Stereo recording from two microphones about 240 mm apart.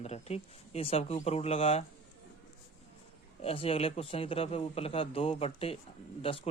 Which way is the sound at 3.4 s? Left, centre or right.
Left.